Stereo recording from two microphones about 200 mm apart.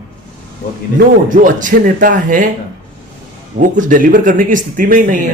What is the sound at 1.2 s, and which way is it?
Speech, 40° right (ahead or behind).